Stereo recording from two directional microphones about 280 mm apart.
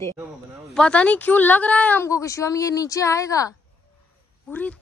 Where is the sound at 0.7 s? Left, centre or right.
Centre.